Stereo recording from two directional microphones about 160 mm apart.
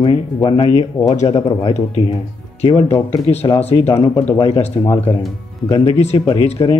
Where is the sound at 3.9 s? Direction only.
20° left (ahead or behind).